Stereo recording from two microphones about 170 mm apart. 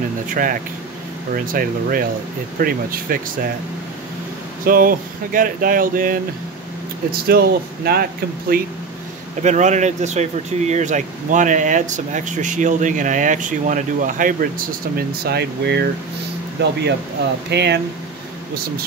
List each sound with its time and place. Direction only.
0.3 s speech: 50° right (ahead or behind)
4.6 s speech: 55° right (ahead or behind)
9.4 s speech: 45° right (ahead or behind); by 15.8 s 75° right (ahead or behind)
16.6 s speech: 85° right